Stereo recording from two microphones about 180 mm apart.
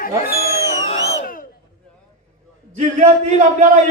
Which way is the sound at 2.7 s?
40° right (ahead or behind).